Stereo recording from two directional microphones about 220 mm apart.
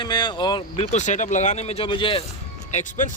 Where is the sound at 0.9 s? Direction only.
35° left (ahead or behind).